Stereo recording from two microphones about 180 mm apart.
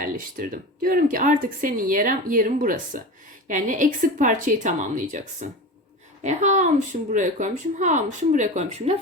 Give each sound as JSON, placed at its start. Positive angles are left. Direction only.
{"t": 0.0, "sound": "speech", "side_deg": -50}